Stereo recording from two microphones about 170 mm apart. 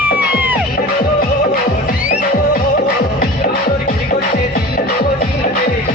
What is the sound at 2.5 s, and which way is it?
Music, 60° left (ahead or behind).